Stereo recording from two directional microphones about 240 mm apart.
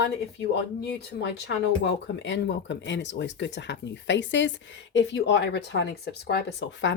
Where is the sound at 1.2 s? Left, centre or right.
Left.